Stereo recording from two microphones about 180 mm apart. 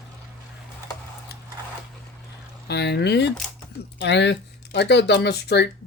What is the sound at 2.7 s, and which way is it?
Speech, 70° left (ahead or behind).